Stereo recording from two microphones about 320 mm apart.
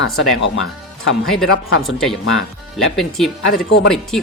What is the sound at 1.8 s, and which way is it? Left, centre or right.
Speech, centre.